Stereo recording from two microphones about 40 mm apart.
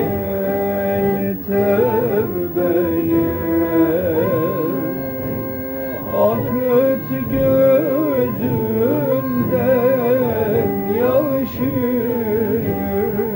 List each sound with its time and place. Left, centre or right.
0.9 s mantra: centre
1.5 s music: centre
2.6 s music: left
6.1 s music: centre
9.7 s music: centre; by 11.0 s left
11.0 s music: centre